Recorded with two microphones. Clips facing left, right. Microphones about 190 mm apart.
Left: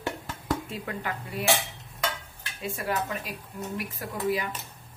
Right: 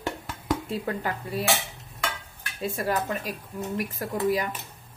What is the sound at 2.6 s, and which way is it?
Speech, 40° right (ahead or behind).